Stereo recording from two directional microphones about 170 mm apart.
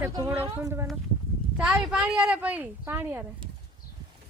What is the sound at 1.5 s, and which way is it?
Speech, 5° right (ahead or behind).